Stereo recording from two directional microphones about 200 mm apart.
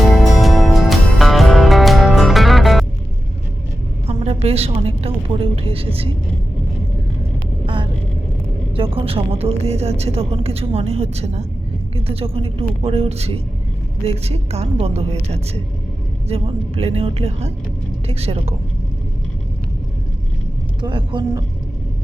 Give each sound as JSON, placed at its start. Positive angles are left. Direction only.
{"t": 0.0, "sound": "music", "side_deg": 0}
{"t": 4.0, "sound": "a woman's voice", "side_deg": -30}
{"t": 8.7, "sound": "a woman's voice", "side_deg": -25}
{"t": 16.3, "sound": "a woman's voice", "side_deg": -30}
{"t": 20.8, "sound": "speech", "side_deg": -25}